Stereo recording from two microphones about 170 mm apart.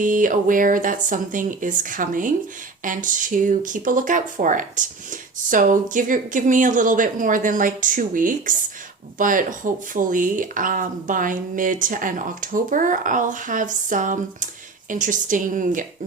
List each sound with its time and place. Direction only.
0.0 s speech: 50° right (ahead or behind)